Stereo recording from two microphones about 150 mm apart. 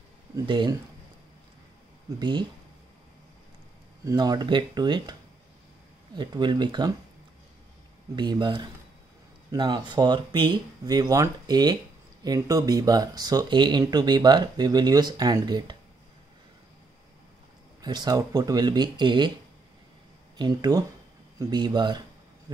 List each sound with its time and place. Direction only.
0.5 s speech: 30° right (ahead or behind)
2.1 s speech: 30° right (ahead or behind)
4.0 s speech: 25° right (ahead or behind)
6.1 s speech: 30° right (ahead or behind)
8.2 s speech: 30° right (ahead or behind)
17.8 s speech: 25° right (ahead or behind)
20.3 s speech: 30° right (ahead or behind)